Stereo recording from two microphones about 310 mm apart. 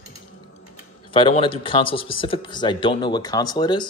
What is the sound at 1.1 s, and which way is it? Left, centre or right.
Speech, centre.